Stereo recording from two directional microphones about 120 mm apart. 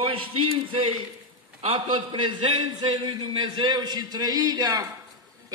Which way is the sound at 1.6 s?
60° right (ahead or behind).